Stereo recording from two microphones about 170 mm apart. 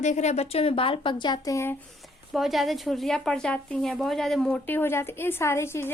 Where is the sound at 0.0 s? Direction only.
45° left (ahead or behind); by 1.7 s 20° left (ahead or behind).